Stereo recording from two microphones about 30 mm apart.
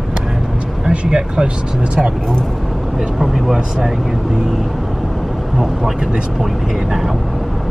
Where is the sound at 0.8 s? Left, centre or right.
Right.